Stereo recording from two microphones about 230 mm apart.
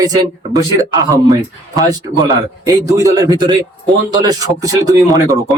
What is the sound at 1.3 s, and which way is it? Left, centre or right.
Speech, centre.